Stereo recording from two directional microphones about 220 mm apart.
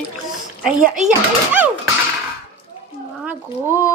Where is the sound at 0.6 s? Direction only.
5° right (ahead or behind).